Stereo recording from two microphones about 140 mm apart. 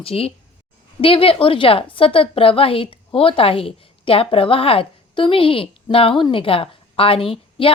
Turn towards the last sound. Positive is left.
turn(degrees=40)  # may be behind; listen again after turning